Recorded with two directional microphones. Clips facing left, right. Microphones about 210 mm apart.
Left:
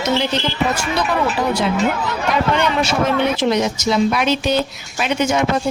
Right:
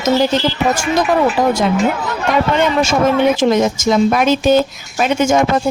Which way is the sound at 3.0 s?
45° right (ahead or behind).